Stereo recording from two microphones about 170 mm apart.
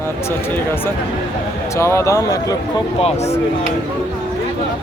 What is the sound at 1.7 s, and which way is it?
Speech, 15° left (ahead or behind).